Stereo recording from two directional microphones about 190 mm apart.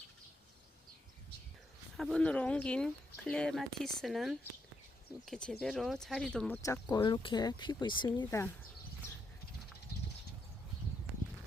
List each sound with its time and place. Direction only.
2.0 s speech: centre (ahead or behind)
6.6 s speech: 20° left (ahead or behind)
9.9 s a sound: 50° left (ahead or behind)